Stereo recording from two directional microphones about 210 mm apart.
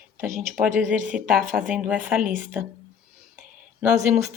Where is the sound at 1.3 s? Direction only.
40° right (ahead or behind).